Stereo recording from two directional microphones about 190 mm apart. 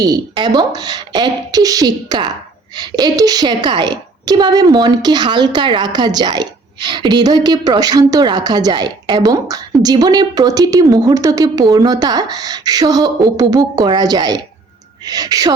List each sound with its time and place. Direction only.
0.0 s a woman's voice: 20° right (ahead or behind)